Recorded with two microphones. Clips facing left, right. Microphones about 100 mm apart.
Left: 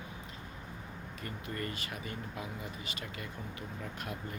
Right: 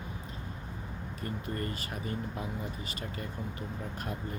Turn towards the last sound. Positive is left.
turn(degrees=-35)  # may be behind; listen again after turning